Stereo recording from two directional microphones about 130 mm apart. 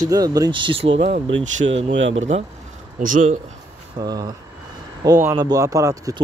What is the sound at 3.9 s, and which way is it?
Speech, 30° right (ahead or behind).